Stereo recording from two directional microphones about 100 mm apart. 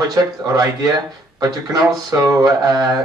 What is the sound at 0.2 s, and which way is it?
Speech, 35° right (ahead or behind).